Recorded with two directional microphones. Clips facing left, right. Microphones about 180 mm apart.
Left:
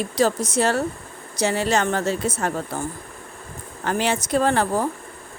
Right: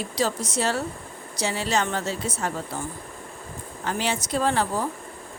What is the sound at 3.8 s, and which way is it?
Speech, 55° left (ahead or behind).